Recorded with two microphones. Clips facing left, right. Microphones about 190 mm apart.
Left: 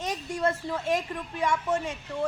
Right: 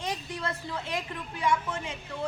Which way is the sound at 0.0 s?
45° left (ahead or behind).